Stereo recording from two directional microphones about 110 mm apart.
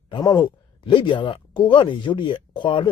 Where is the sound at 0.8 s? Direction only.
50° left (ahead or behind).